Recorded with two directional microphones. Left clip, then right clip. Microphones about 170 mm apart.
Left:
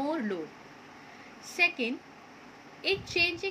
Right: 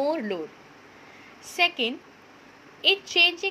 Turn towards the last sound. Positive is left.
turn(degrees=-20)  # may be behind; listen again after turning